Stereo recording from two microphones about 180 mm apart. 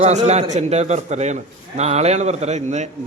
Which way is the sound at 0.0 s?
40° right (ahead or behind).